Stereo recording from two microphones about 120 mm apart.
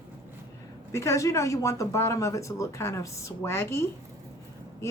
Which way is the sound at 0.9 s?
25° left (ahead or behind).